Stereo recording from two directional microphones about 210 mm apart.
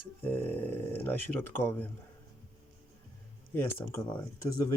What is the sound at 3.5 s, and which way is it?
Speech, 10° left (ahead or behind).